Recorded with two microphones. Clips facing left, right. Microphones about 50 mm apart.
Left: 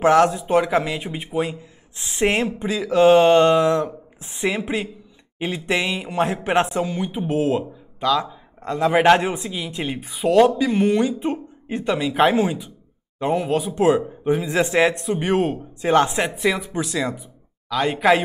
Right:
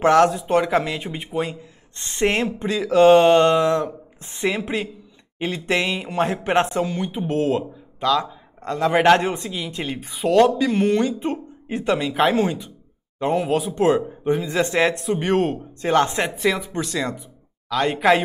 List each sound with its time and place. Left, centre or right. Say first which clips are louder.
0.0 s speech: even; centre